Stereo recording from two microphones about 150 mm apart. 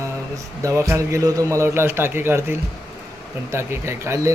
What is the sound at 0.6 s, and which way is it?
Speech, 20° right (ahead or behind).